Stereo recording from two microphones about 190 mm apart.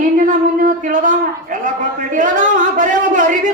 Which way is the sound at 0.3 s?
45° right (ahead or behind).